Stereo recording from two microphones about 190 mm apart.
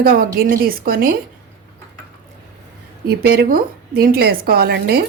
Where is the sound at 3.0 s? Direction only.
55° right (ahead or behind).